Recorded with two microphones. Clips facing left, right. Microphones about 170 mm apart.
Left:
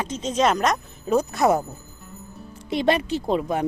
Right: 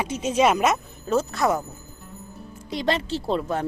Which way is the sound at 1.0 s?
15° left (ahead or behind).